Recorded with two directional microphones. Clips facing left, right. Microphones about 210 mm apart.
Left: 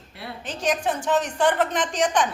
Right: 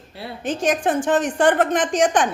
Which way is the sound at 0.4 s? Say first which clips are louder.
Right 5 dB; 50° right (ahead or behind).